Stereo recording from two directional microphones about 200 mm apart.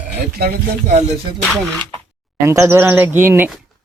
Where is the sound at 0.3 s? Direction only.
50° right (ahead or behind).